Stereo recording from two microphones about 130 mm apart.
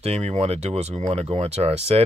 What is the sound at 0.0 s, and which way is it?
Speech, 55° right (ahead or behind).